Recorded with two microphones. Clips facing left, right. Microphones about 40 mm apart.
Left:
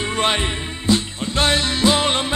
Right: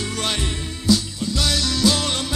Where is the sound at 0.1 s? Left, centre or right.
Left.